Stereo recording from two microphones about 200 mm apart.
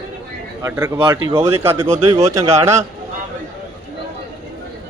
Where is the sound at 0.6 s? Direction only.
15° right (ahead or behind).